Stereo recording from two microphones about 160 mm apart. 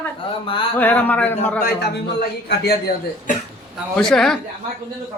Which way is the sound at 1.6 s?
90° left.